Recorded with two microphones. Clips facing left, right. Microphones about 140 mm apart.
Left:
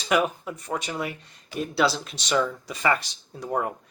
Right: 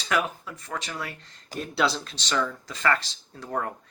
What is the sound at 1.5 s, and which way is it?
Speech, 5° left (ahead or behind).